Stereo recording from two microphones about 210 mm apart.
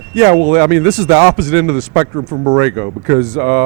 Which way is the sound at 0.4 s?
15° right (ahead or behind).